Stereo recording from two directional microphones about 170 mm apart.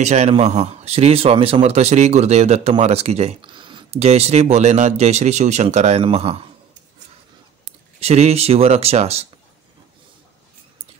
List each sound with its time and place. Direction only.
0.0 s speech: 40° right (ahead or behind)
7.6 s speech: 40° right (ahead or behind)